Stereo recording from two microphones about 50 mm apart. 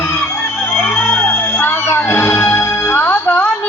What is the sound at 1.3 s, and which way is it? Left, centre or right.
Music, left.